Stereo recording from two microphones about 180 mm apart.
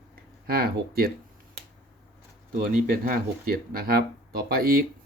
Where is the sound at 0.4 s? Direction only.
55° right (ahead or behind).